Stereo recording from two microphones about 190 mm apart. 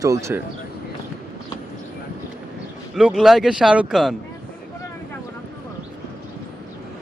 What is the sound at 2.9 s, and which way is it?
Speech, 5° right (ahead or behind).